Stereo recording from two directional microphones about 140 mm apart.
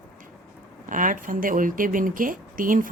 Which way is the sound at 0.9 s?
70° right (ahead or behind).